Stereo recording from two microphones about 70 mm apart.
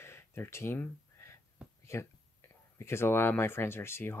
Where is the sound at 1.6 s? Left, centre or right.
Centre.